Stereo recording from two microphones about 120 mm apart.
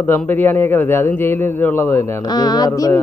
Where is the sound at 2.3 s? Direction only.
35° left (ahead or behind).